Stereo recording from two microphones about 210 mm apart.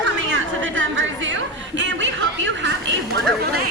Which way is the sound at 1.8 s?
60° right (ahead or behind).